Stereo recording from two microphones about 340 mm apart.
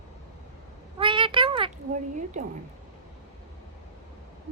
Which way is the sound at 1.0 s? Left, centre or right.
Centre.